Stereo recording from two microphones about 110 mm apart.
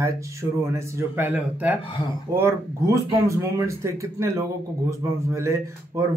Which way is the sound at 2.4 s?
25° right (ahead or behind).